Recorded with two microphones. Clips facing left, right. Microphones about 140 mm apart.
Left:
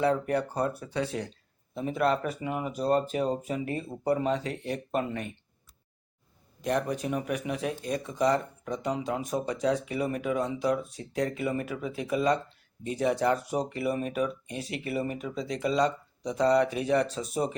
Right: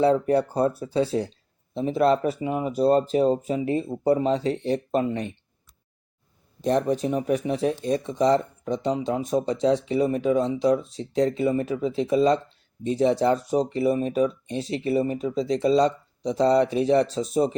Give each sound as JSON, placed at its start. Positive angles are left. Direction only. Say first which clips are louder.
{"t": 0.0, "sound": "speech", "louder": "right 6 dB", "side_deg": -30}
{"t": 6.6, "sound": "speech", "louder": "right 6 dB", "side_deg": -25}